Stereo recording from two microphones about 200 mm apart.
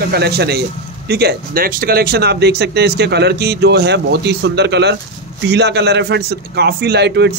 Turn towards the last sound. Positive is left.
turn(degrees=-55)  # may be behind; listen again after turning